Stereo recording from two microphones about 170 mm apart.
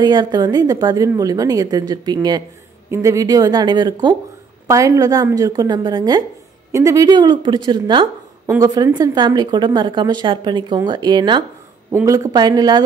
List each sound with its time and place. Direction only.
0.0 s a woman's voice: 25° right (ahead or behind)